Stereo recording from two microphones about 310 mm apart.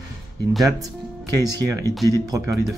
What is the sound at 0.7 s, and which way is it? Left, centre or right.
Speech, centre.